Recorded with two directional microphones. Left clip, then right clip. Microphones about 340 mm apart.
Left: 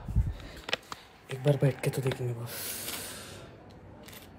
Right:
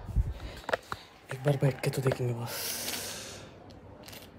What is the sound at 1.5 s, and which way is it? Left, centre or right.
Speech, centre.